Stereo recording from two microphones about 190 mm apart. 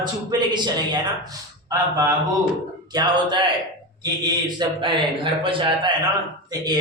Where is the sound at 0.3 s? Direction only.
20° right (ahead or behind).